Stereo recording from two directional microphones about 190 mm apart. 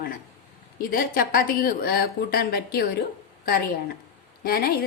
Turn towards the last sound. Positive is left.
turn(degrees=50)  # may be behind; listen again after turning